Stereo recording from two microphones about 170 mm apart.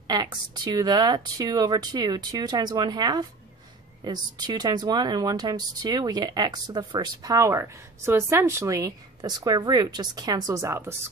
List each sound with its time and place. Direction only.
0.0 s speech: 25° right (ahead or behind)